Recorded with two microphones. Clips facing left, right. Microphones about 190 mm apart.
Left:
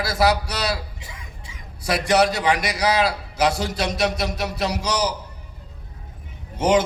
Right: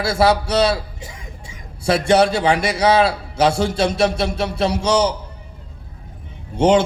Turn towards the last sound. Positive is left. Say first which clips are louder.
# right 4 dB
turn(degrees=-30)  # may be behind; listen again after turning